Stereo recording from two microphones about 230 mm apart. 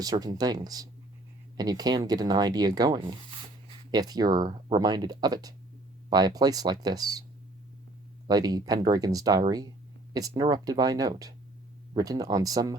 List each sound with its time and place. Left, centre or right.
0.0 s speech: centre
3.7 s a sound: centre
4.4 s speech: centre
8.3 s speech: centre